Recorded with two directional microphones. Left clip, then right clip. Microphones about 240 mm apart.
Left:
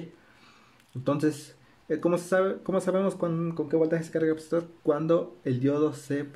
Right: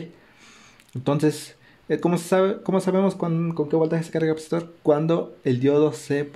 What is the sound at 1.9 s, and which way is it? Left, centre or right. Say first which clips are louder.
Speech: right 4 dB; right.